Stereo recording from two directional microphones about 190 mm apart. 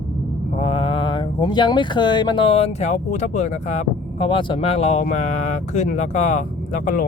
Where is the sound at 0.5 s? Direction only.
30° left (ahead or behind).